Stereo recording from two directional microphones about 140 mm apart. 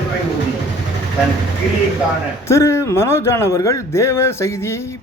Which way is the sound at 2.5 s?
20° left (ahead or behind).